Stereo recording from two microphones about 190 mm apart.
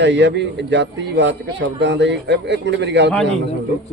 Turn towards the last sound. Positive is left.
turn(degrees=-65)  # may be behind; listen again after turning